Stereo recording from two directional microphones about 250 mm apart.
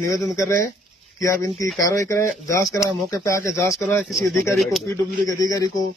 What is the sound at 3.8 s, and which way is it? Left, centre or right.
Speech, centre.